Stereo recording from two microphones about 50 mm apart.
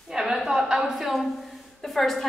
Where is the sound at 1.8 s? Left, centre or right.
Centre.